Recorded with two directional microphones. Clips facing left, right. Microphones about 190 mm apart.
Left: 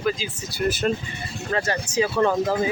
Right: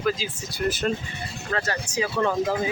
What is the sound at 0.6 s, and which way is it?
Speech, 10° left (ahead or behind).